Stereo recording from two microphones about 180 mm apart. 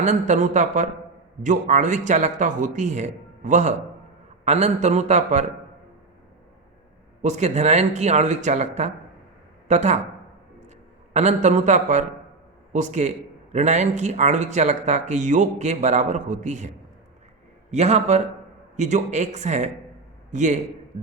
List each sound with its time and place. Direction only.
0.0 s a man's voice: 40° right (ahead or behind)
7.2 s a man's voice: 40° right (ahead or behind)
11.1 s a man's voice: 40° right (ahead or behind)